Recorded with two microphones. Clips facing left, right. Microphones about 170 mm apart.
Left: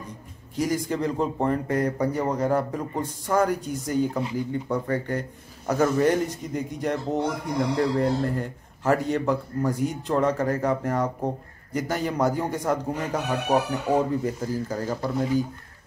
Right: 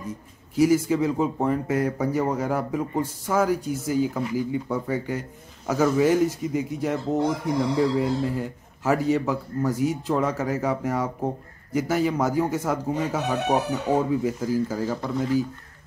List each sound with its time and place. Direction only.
0.6 s speech: 5° right (ahead or behind)
14.9 s speech: 10° left (ahead or behind)